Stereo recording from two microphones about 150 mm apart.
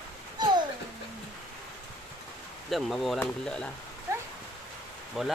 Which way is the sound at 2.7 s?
Centre (ahead or behind).